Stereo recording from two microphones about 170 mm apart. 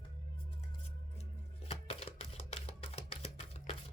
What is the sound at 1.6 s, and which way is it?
Music, 35° left (ahead or behind).